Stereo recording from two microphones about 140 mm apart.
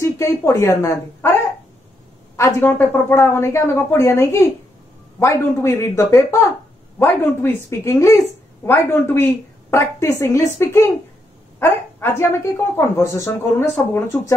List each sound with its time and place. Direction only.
0.0 s speech: 20° left (ahead or behind)
2.3 s speech: 15° left (ahead or behind)